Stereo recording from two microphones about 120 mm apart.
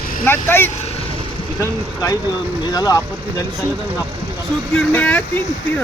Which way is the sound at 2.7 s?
30° left (ahead or behind).